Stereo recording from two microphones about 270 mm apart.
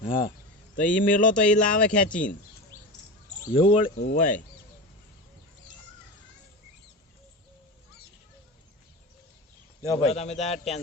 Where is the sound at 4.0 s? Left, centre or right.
Left.